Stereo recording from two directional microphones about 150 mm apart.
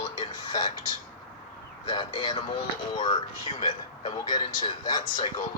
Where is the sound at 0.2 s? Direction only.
30° left (ahead or behind).